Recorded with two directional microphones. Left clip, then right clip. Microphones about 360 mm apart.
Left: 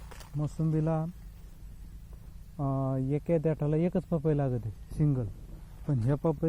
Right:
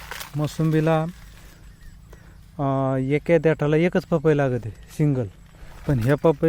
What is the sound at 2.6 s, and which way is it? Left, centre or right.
Speech, centre.